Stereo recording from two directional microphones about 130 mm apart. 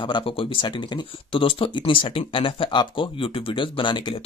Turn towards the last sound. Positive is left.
turn(degrees=40)  # may be behind; listen again after turning